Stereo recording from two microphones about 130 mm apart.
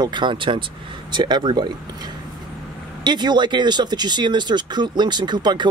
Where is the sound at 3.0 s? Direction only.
35° right (ahead or behind).